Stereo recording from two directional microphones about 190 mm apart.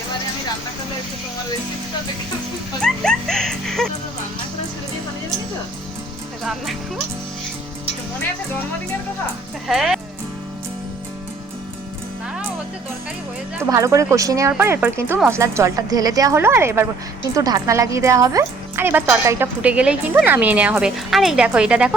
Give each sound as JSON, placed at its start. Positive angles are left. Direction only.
{"t": 2.8, "sound": "music", "side_deg": 5}
{"t": 6.4, "sound": "speech", "side_deg": 0}
{"t": 9.6, "sound": "speech", "side_deg": 0}
{"t": 13.7, "sound": "speech", "side_deg": -15}